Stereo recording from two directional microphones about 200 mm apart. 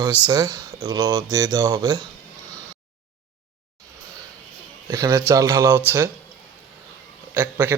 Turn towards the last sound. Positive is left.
turn(degrees=-15)  # may be behind; listen again after turning